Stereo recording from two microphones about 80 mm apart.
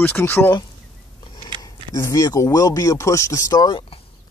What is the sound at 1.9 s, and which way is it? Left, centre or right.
Speech, left.